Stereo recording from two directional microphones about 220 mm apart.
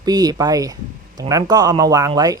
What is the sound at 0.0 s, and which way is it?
Speech, 20° right (ahead or behind).